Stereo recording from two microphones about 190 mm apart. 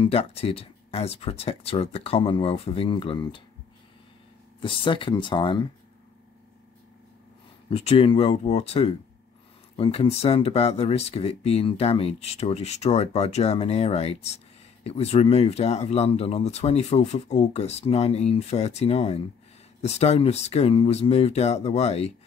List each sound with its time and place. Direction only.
0.0 s speech: 30° left (ahead or behind)
4.6 s speech: 25° left (ahead or behind)
7.7 s speech: 30° left (ahead or behind)